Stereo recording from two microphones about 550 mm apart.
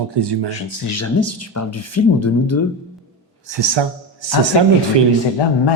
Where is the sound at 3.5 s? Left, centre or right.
Right.